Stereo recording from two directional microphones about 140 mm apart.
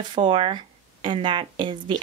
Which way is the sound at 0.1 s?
40° right (ahead or behind).